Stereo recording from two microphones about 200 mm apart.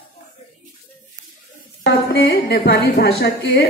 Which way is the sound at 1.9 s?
55° left (ahead or behind).